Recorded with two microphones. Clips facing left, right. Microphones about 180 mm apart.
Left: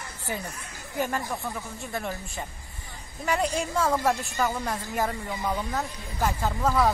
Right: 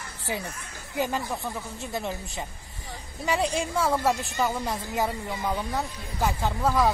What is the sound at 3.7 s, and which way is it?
A woman's voice, 5° right (ahead or behind).